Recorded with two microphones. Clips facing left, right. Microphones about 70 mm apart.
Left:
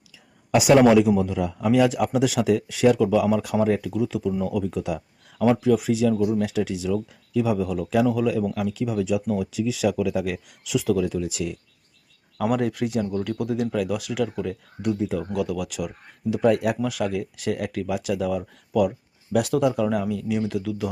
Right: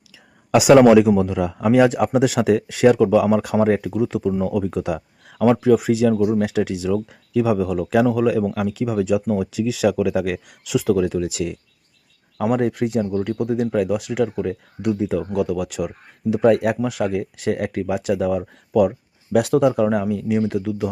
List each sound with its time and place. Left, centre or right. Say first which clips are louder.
0.5 s speech: right 4 dB; right
1.6 s speech: right 4 dB; right
6.4 s speech: right 4 dB; right
9.2 s speech: right 4 dB; right
9.5 s speech: right 4 dB; right
12.4 s speech: right 4 dB; right
14.8 s speech: right 3 dB; right
15.3 s speech: right 4 dB; right